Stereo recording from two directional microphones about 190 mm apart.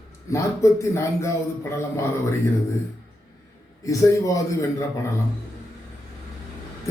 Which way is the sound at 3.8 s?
15° left (ahead or behind).